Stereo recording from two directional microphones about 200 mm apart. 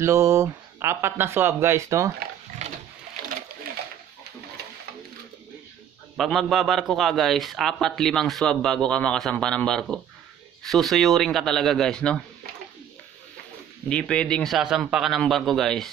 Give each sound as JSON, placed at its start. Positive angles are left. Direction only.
{"t": 0.0, "sound": "speech", "side_deg": -15}
{"t": 2.6, "sound": "a sound", "side_deg": -35}
{"t": 6.1, "sound": "a man's voice", "side_deg": 0}
{"t": 13.8, "sound": "a man's voice", "side_deg": 5}